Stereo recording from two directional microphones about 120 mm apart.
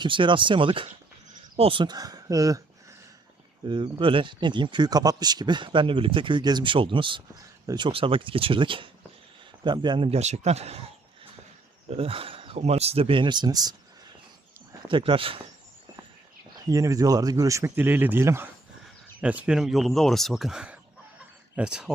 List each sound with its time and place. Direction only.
0.0 s speech: 45° right (ahead or behind)
3.7 s speech: 45° right (ahead or behind)
10.1 s speech: 65° right (ahead or behind)
11.9 s speech: 50° right (ahead or behind); by 13.7 s 35° right (ahead or behind)
14.8 s speech: 45° right (ahead or behind)
16.6 s speech: 30° right (ahead or behind); by 21.9 s 5° right (ahead or behind)